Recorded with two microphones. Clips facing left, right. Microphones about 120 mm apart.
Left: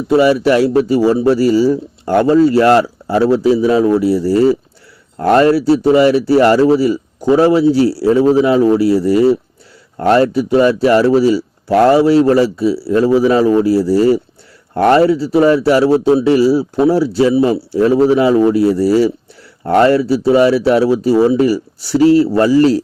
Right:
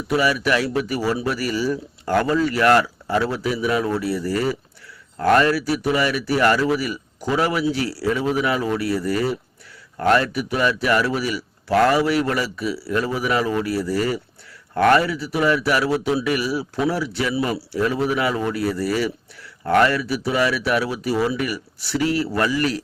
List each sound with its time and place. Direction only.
0.1 s speech: 25° left (ahead or behind)